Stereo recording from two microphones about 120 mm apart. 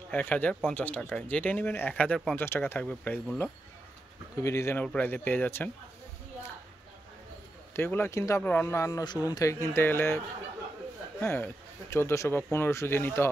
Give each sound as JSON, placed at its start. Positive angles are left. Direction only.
{"t": 0.1, "sound": "speech", "side_deg": 15}
{"t": 2.3, "sound": "speech", "side_deg": 20}
{"t": 4.4, "sound": "speech", "side_deg": 25}
{"t": 4.8, "sound": "speech", "side_deg": 15}
{"t": 7.7, "sound": "speech", "side_deg": 20}
{"t": 8.4, "sound": "speech", "side_deg": 15}
{"t": 9.0, "sound": "speech", "side_deg": 35}